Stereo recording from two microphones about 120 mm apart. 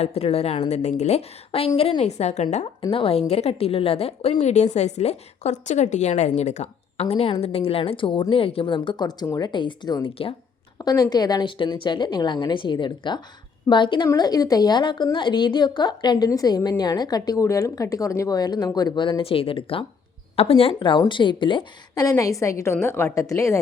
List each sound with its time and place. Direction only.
0.0 s a woman's voice: 60° left (ahead or behind)
0.7 s a woman's voice: 70° left (ahead or behind)
2.9 s a woman's voice: 50° left (ahead or behind); by 9.5 s 25° left (ahead or behind)
9.5 s a woman's voice: 40° left (ahead or behind)
22.0 s a woman's voice: 30° left (ahead or behind)